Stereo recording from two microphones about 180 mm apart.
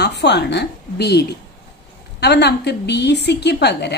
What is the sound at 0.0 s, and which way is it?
A woman's voice, 70° left (ahead or behind).